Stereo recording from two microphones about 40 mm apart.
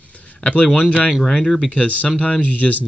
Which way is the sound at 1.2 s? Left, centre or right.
Centre.